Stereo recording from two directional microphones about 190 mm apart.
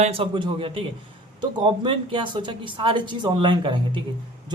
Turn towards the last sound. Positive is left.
turn(degrees=-25)  # may be behind; listen again after turning